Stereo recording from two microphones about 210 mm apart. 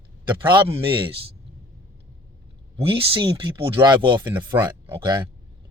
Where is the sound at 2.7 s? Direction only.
25° right (ahead or behind).